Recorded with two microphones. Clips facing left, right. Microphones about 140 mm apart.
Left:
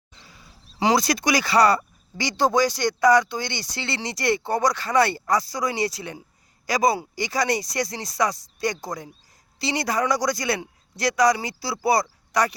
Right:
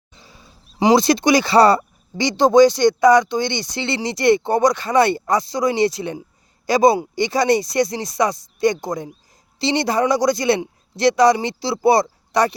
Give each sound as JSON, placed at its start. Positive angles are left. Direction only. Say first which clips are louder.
{"t": 0.2, "sound": "speech", "louder": "right 3 dB", "side_deg": -25}